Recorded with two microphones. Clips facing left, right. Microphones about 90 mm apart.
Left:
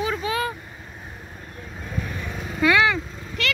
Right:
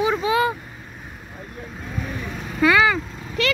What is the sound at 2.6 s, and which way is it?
Speech, 5° right (ahead or behind).